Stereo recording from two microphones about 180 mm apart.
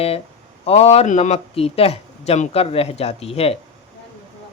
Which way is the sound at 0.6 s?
35° left (ahead or behind).